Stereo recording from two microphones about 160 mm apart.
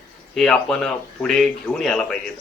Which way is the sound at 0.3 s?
5° left (ahead or behind).